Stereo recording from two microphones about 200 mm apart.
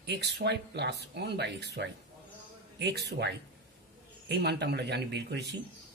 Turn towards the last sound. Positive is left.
turn(degrees=-55)  # may be behind; listen again after turning